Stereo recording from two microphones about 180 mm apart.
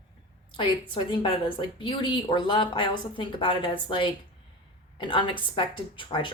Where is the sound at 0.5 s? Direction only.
30° left (ahead or behind).